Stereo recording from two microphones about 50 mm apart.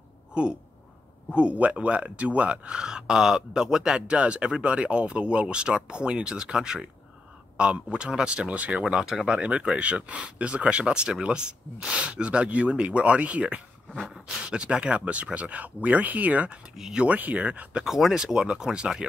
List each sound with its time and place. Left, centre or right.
0.3 s speech: right
8.8 s speech: centre
9.4 s speech: right
17.8 s speech: centre